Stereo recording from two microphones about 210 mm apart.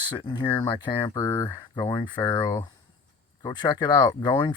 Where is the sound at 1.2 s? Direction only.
10° left (ahead or behind).